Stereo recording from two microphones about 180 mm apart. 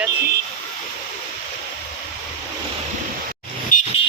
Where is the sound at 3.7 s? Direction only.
45° left (ahead or behind).